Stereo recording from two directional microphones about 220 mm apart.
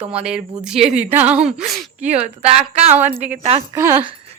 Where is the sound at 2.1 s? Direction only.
30° right (ahead or behind).